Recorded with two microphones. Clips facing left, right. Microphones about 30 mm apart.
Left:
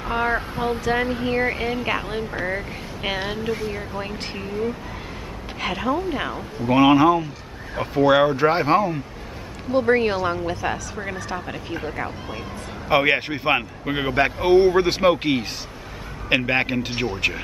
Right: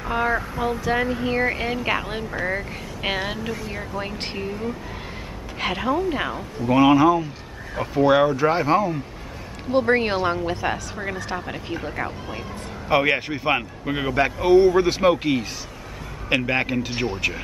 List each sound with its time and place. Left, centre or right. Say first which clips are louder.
0.0 s a sound: even; centre
0.3 s speech: even; left
1.0 s speech: even; centre
1.3 s speech: even; centre
5.6 s speech: right 1 dB; centre
6.6 s speech: left 1 dB; centre
8.3 s speech: left 1 dB; left
9.7 s speech: left 1 dB; centre